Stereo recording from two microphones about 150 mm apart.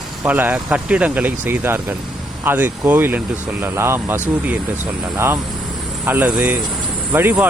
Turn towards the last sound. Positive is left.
turn(degrees=-15)  # may be behind; listen again after turning